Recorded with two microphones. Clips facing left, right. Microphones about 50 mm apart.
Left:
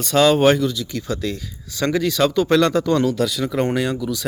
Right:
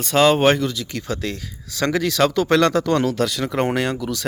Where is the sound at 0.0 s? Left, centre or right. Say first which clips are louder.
Left 1 dB; right.